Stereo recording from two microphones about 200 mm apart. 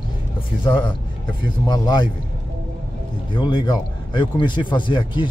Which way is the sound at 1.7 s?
20° left (ahead or behind).